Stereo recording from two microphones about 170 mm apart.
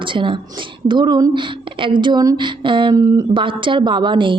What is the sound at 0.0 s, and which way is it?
A woman's voice, 30° right (ahead or behind).